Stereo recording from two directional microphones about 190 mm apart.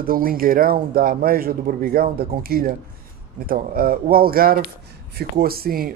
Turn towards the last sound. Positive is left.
turn(degrees=-50)  # may be behind; listen again after turning